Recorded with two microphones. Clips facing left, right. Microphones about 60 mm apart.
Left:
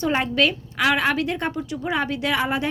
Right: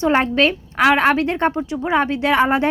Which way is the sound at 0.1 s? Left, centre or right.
Right.